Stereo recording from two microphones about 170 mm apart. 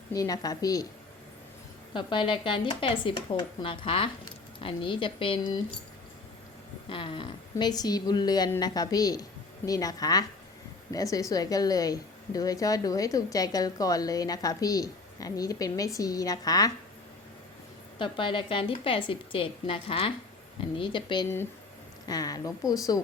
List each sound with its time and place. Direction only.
0.1 s a woman's voice: 20° left (ahead or behind)
1.9 s a woman's voice: 30° left (ahead or behind)
6.8 s a woman's voice: 30° left (ahead or behind)
18.0 s a woman's voice: 30° left (ahead or behind)